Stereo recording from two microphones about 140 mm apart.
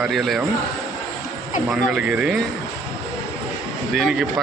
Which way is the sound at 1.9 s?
5° right (ahead or behind).